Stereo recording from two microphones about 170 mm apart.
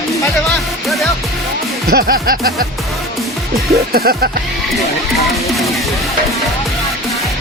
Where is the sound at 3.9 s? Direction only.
60° right (ahead or behind).